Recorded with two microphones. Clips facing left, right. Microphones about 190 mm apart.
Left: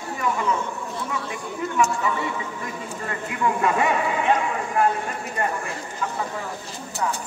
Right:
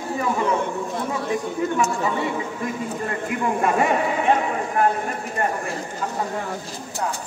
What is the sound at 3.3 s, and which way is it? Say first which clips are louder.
A man's voice: even; 45° right (ahead or behind).